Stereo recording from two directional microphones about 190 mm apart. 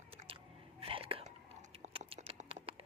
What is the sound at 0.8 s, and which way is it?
Whispering, 30° right (ahead or behind).